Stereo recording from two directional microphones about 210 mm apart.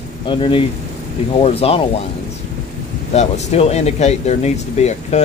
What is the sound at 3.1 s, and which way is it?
Speech, 30° left (ahead or behind).